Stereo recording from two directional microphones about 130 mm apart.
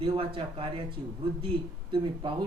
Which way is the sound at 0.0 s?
45° right (ahead or behind).